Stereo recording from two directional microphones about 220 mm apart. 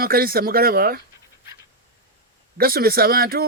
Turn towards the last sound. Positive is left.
turn(degrees=-45)  # may be behind; listen again after turning